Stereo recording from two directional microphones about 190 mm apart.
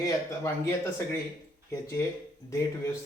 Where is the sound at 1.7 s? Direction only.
15° left (ahead or behind).